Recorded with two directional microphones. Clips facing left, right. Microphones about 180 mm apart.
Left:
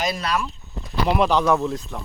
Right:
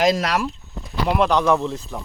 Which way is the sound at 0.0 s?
90° right.